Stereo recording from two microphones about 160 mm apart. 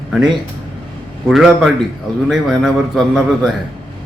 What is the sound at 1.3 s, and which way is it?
Speech, centre (ahead or behind).